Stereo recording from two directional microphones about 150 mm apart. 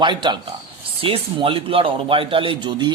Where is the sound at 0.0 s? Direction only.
30° right (ahead or behind).